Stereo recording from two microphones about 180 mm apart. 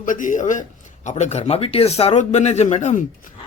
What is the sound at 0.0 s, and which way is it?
A man's voice, 45° left (ahead or behind).